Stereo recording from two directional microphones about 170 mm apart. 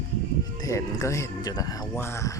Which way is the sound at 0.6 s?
20° left (ahead or behind).